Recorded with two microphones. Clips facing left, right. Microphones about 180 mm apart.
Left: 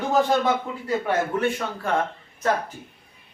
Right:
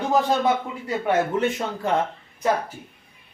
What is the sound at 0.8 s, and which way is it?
Speech, 20° right (ahead or behind).